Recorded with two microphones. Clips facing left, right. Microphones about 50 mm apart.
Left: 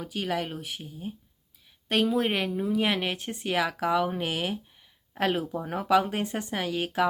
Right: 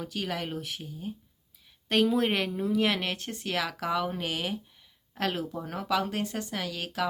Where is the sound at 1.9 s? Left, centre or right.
Centre.